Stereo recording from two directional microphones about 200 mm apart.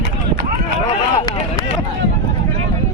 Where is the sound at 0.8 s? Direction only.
20° left (ahead or behind).